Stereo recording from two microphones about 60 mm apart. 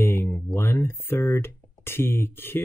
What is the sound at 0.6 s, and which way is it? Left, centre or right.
Speech, left.